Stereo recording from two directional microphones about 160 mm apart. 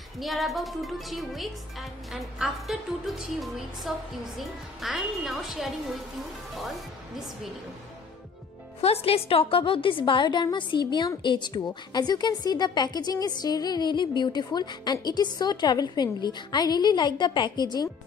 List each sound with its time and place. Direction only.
0.2 s speech: centre (ahead or behind)
8.8 s a woman's voice: 40° left (ahead or behind)